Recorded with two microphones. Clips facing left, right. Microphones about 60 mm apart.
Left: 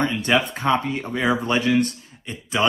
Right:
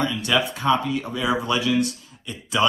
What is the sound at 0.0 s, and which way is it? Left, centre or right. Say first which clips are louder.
Speech: left 2 dB; left.